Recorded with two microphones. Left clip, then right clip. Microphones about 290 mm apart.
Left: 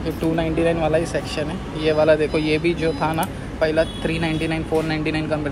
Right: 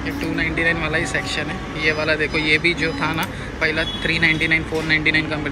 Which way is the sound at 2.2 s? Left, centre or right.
Left.